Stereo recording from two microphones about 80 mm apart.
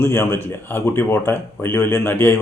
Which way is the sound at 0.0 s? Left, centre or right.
Left.